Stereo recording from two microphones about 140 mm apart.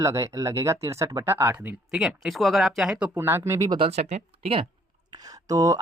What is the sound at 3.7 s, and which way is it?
Speech, 45° right (ahead or behind).